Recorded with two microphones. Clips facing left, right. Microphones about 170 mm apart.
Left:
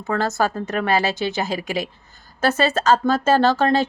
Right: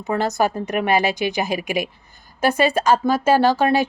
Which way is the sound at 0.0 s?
15° right (ahead or behind).